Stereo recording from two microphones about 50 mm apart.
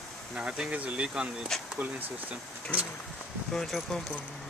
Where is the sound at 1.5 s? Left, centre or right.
Centre.